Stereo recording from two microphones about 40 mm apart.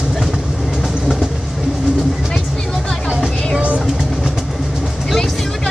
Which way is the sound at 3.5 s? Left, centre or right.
Right.